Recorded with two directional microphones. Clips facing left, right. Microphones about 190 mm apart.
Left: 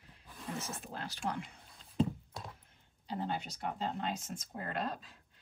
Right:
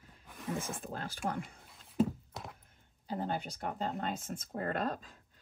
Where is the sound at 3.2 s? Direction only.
50° right (ahead or behind).